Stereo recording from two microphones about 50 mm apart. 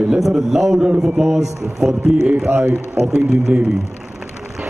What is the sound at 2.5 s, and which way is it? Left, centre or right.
Speech, right.